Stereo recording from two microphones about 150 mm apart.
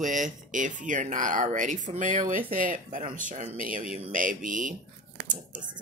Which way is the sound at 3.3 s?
45° right (ahead or behind).